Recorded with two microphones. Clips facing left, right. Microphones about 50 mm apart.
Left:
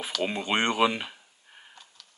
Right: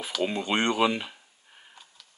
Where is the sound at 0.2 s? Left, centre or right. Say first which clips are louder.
Right 1 dB; left.